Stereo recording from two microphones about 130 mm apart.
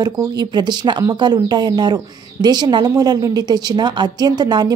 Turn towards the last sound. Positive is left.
turn(degrees=-30)  # may be behind; listen again after turning